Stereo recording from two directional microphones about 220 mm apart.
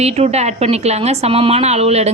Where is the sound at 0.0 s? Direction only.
30° right (ahead or behind).